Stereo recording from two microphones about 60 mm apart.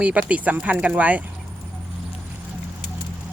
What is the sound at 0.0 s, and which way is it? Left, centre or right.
Speech, right.